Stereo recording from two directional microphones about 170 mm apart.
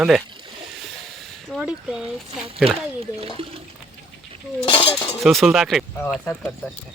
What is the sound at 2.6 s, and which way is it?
Speech, 35° right (ahead or behind).